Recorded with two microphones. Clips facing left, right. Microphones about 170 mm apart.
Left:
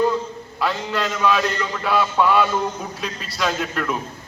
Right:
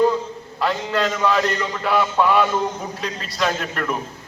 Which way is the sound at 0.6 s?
20° right (ahead or behind).